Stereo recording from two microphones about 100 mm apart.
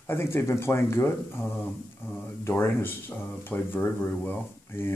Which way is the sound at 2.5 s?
20° left (ahead or behind).